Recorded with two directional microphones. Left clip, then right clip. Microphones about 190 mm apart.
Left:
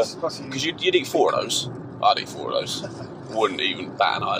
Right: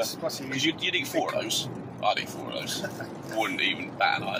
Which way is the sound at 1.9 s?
50° left (ahead or behind).